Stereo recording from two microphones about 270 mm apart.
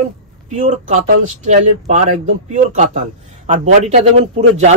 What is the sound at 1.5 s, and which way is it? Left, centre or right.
A man's voice, right.